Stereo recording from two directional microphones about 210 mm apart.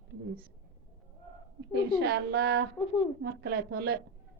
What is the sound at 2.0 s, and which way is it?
A woman's voice, 50° right (ahead or behind).